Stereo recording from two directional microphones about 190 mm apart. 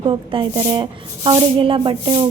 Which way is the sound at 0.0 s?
25° right (ahead or behind).